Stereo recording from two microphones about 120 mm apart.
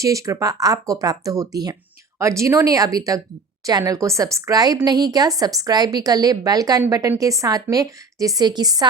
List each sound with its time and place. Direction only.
0.0 s a woman's voice: 25° right (ahead or behind)